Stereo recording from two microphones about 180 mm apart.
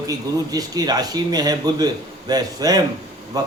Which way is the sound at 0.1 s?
20° right (ahead or behind).